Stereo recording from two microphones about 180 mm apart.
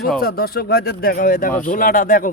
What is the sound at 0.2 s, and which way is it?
Speech, 55° left (ahead or behind).